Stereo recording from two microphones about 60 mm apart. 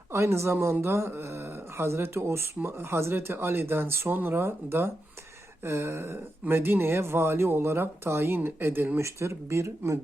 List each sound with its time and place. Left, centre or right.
0.1 s speech: right
9.0 s speech: right